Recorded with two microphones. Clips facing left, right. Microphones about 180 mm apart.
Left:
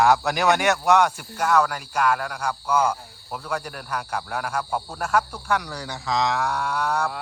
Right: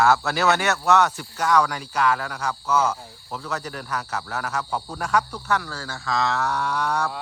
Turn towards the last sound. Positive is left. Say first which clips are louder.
# even
turn(degrees=10)  # may be behind; listen again after turning